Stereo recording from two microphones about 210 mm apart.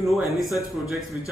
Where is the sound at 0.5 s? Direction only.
15° left (ahead or behind).